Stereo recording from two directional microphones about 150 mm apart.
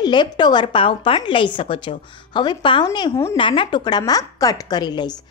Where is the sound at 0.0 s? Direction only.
30° left (ahead or behind).